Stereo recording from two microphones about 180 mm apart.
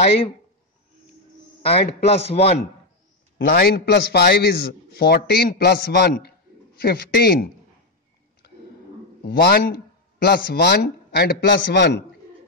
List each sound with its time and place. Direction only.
1.6 s a man's voice: 35° left (ahead or behind)
3.4 s a man's voice: 60° left (ahead or behind)
9.2 s speech: 65° left (ahead or behind)